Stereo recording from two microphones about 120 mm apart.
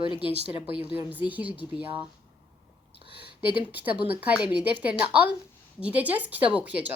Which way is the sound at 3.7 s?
15° right (ahead or behind).